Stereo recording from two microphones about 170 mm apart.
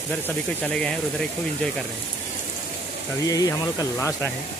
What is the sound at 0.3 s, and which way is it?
Speech, 5° left (ahead or behind).